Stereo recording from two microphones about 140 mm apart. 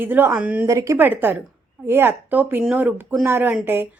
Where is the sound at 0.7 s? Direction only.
20° right (ahead or behind).